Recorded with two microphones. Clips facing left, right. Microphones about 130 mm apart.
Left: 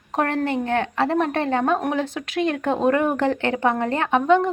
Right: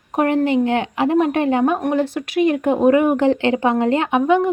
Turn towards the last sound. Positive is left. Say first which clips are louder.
# right 2 dB
turn(degrees=-10)  # may be behind; listen again after turning